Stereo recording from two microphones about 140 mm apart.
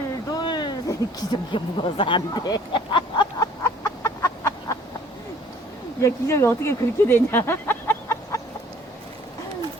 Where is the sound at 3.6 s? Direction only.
20° left (ahead or behind).